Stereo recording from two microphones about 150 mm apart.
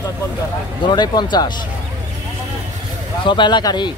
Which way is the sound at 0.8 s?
30° left (ahead or behind).